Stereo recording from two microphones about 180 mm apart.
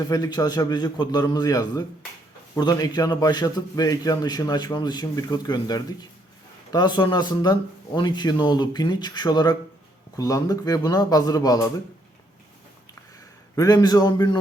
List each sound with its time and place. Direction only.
0.0 s a man's voice: 20° left (ahead or behind)
13.6 s a man's voice: 20° left (ahead or behind)